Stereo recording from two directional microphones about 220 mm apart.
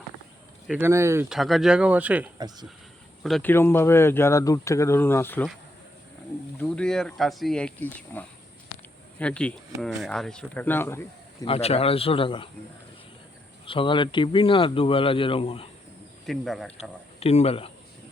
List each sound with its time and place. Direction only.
0.7 s speech: 10° right (ahead or behind)
3.2 s speech: 5° left (ahead or behind)
6.6 s speech: 5° left (ahead or behind)
11.4 s speech: 25° left (ahead or behind)
13.7 s speech: 25° left (ahead or behind)
16.2 s speech: centre (ahead or behind)
17.2 s speech: 30° left (ahead or behind)